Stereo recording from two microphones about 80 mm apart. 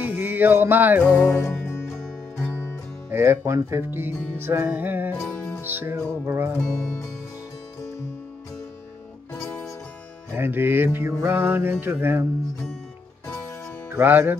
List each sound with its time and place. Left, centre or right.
0.0 s music: right
1.2 s music: left
3.1 s music: right
9.3 s music: left
10.3 s music: right
14.0 s music: right